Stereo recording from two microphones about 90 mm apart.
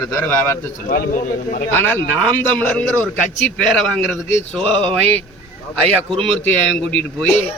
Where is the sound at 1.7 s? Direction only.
25° left (ahead or behind).